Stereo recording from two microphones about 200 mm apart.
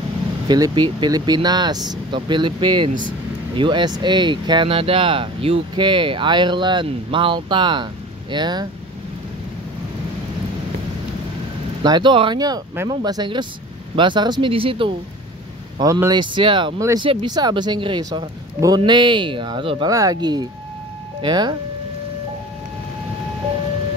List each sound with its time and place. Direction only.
0.5 s speech: 20° right (ahead or behind)
11.8 s speech: 20° right (ahead or behind)
15.8 s speech: 15° right (ahead or behind)